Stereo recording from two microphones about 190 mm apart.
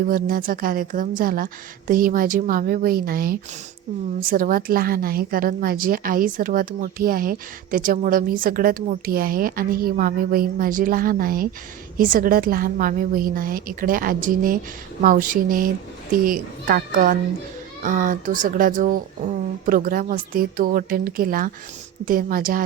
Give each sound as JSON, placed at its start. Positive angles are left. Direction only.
{"t": 0.0, "sound": "a woman's voice", "side_deg": -45}